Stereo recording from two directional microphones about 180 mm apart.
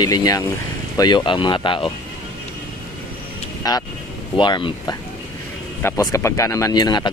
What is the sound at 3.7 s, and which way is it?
Speech, 20° left (ahead or behind).